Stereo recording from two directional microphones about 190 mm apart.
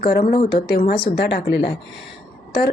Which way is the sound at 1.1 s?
60° left (ahead or behind).